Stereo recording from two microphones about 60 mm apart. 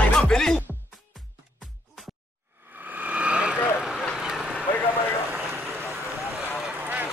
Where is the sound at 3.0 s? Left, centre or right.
Right.